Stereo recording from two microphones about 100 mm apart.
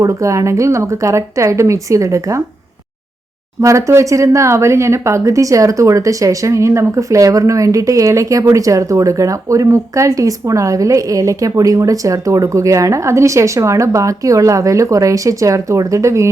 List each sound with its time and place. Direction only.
0.0 s speech: 30° right (ahead or behind)
3.6 s speech: 30° right (ahead or behind)